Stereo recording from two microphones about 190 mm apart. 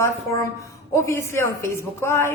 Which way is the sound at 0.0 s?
15° left (ahead or behind).